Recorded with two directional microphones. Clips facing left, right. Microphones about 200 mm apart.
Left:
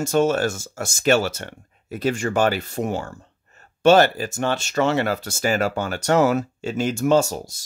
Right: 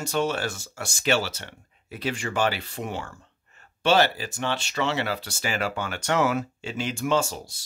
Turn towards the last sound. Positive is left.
turn(degrees=40)  # may be behind; listen again after turning